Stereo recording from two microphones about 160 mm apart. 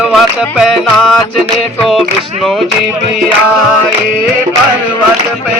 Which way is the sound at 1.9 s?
Centre (ahead or behind).